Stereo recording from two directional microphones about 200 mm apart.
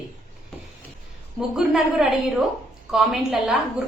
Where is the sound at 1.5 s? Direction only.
5° right (ahead or behind).